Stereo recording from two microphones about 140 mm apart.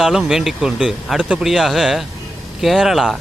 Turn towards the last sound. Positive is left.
turn(degrees=0)  # may be behind; listen again after turning